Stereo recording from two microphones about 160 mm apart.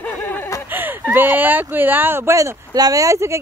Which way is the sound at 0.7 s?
10° right (ahead or behind).